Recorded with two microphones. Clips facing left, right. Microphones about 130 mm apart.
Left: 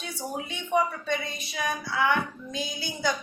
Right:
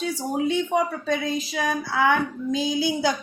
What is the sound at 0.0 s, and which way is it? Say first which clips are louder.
Speech: right 10 dB; 90° right.